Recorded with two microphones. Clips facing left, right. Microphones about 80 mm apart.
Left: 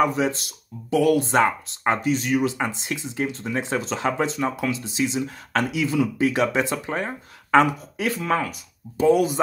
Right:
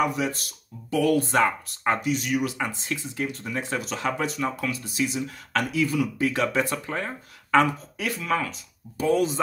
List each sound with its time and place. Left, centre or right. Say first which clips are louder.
0.0 s speech: left 4 dB; left
2.0 s speech: left 4 dB; left
8.2 s speech: left 2 dB; left
8.9 s speech: left 5 dB; left